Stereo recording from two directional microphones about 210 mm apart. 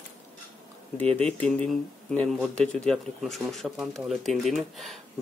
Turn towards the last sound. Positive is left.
turn(degrees=0)  # may be behind; listen again after turning